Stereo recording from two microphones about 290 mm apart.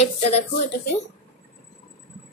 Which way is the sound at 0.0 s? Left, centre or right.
Left.